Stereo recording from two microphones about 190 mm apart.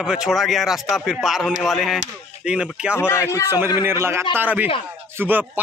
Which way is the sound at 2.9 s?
15° left (ahead or behind).